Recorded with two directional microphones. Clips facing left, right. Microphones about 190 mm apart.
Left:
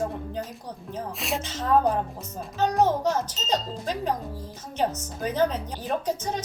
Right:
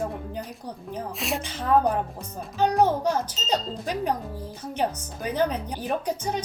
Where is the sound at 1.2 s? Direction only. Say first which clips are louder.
Right 1 dB; centre (ahead or behind).